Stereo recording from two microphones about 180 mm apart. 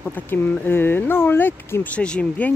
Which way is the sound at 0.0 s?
10° left (ahead or behind).